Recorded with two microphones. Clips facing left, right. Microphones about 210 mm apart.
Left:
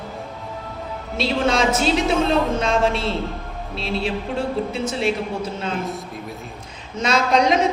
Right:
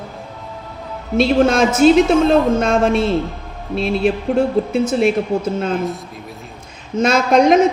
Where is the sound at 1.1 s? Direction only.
50° right (ahead or behind).